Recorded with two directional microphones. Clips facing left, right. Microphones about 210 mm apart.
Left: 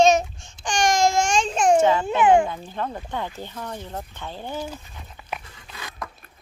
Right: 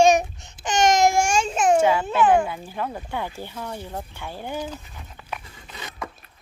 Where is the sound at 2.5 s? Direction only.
10° right (ahead or behind).